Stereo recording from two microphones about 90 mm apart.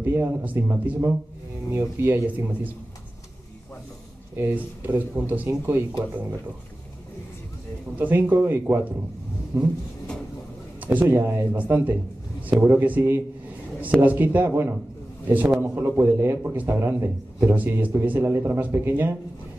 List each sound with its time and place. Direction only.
0.0 s a man's voice: 25° right (ahead or behind)
4.4 s a man's voice: 25° right (ahead or behind)
8.0 s a man's voice: 20° right (ahead or behind)
9.5 s vehicle: 35° right (ahead or behind)
10.8 s a man's voice: 20° right (ahead or behind)